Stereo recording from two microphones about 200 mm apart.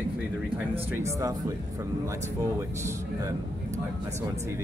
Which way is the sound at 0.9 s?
15° right (ahead or behind).